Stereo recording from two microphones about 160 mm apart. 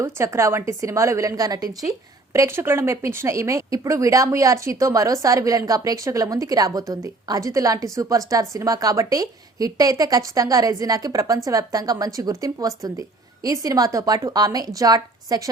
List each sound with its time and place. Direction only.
0.0 s a woman's voice: 20° right (ahead or behind)